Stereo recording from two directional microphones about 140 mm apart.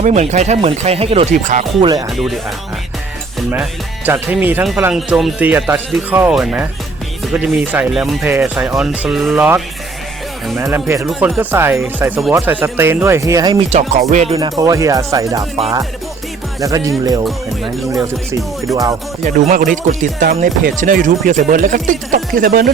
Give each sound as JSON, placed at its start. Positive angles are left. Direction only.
{"t": 0.0, "sound": "speech", "side_deg": -55}
{"t": 1.8, "sound": "speech", "side_deg": -25}
{"t": 3.5, "sound": "speech", "side_deg": -15}
{"t": 8.2, "sound": "speech", "side_deg": -15}
{"t": 10.6, "sound": "speech", "side_deg": -15}
{"t": 13.5, "sound": "speech", "side_deg": -50}
{"t": 14.1, "sound": "speech", "side_deg": -60}
{"t": 14.3, "sound": "speech", "side_deg": -25}
{"t": 16.6, "sound": "speech", "side_deg": -25}
{"t": 18.7, "sound": "speech", "side_deg": -25}
{"t": 19.2, "sound": "speech", "side_deg": -70}
{"t": 20.4, "sound": "speech", "side_deg": -75}